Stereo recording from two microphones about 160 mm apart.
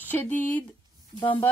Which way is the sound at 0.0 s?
10° left (ahead or behind).